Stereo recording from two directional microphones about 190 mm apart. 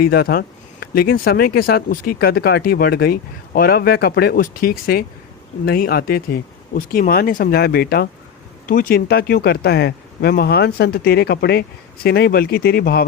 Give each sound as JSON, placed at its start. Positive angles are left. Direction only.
{"t": 0.0, "sound": "speech", "side_deg": 55}